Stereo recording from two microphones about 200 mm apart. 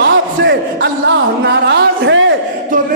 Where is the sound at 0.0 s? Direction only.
65° right (ahead or behind).